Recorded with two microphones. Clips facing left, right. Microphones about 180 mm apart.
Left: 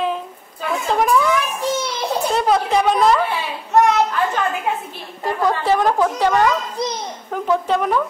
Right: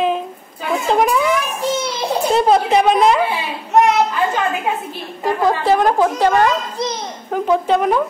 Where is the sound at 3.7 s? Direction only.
20° right (ahead or behind).